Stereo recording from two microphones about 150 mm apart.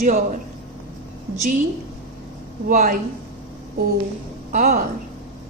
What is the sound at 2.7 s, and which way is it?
Speech, 65° right (ahead or behind).